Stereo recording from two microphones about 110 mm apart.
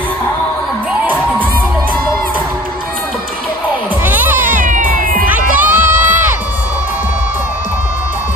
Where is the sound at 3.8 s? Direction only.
15° right (ahead or behind).